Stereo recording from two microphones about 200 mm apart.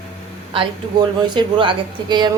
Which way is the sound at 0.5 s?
20° right (ahead or behind).